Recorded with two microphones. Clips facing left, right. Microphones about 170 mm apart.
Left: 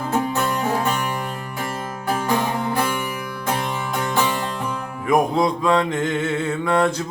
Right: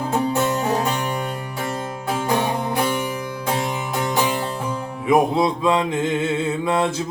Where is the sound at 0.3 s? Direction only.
20° right (ahead or behind).